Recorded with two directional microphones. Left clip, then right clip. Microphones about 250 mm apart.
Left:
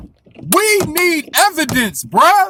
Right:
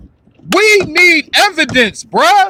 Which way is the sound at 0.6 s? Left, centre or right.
Left.